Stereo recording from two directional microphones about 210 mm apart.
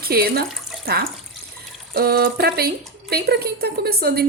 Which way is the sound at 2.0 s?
50° right (ahead or behind).